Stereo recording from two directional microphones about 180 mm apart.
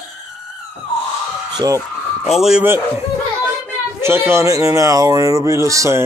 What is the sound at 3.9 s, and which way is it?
Speech, 15° right (ahead or behind).